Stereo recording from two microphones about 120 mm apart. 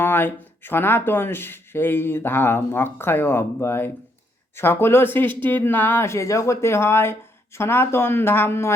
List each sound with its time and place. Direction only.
0.0 s speech: 15° left (ahead or behind)